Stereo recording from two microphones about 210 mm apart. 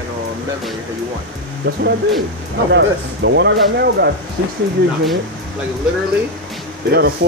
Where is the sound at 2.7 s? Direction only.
55° right (ahead or behind).